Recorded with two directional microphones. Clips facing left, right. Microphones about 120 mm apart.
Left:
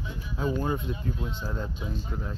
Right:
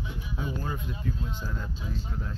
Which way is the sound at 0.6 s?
25° left (ahead or behind).